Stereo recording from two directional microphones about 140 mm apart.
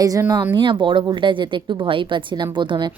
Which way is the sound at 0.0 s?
25° right (ahead or behind).